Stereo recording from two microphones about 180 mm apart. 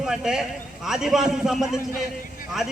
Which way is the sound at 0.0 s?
Centre (ahead or behind).